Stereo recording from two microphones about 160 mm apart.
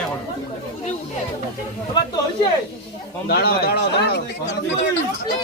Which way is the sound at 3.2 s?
75° left (ahead or behind).